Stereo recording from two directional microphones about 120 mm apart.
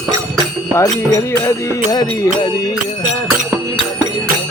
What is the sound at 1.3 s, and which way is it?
Music, 25° left (ahead or behind).